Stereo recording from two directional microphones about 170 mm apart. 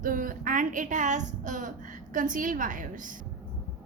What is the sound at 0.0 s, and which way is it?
A woman's voice, 55° right (ahead or behind).